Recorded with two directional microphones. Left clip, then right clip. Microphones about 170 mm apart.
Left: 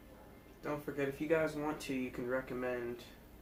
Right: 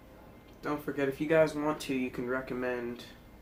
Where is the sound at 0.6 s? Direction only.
50° right (ahead or behind).